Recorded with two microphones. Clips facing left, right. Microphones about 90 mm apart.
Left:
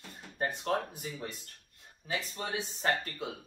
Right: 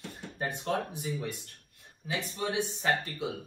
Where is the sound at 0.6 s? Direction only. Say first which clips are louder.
Right 3 dB; 50° left (ahead or behind).